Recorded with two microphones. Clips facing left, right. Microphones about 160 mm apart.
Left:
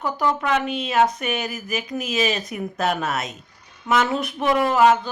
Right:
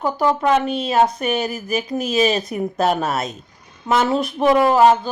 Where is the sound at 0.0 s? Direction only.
35° right (ahead or behind).